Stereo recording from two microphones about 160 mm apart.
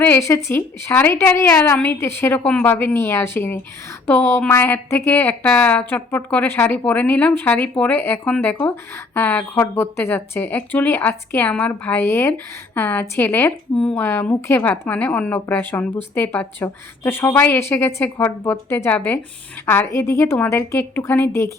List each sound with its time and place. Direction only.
0.0 s speech: 15° left (ahead or behind)